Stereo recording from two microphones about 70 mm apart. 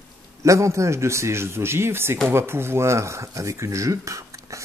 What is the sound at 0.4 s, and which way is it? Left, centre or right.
Speech, right.